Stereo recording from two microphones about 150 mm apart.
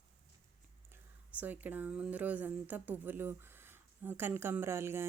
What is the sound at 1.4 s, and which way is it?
A woman's voice, 10° right (ahead or behind).